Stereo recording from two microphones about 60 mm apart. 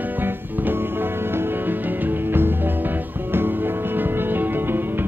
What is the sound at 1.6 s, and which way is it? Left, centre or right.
Music, right.